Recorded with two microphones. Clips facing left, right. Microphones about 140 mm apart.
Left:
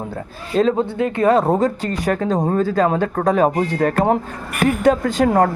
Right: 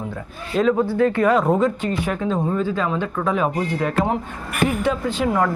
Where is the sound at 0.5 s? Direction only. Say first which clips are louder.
Left 1 dB; 30° left (ahead or behind).